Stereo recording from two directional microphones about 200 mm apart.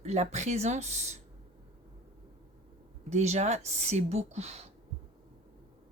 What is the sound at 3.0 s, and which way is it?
Speech, 35° right (ahead or behind).